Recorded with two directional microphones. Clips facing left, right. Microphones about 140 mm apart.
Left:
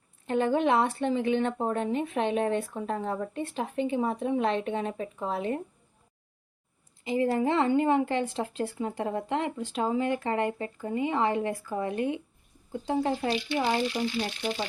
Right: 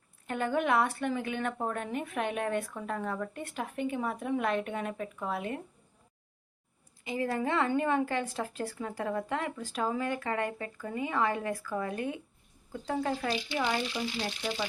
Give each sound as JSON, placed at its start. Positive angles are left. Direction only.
{"t": 0.3, "sound": "a woman's voice", "side_deg": 25}
{"t": 7.0, "sound": "a woman's voice", "side_deg": 25}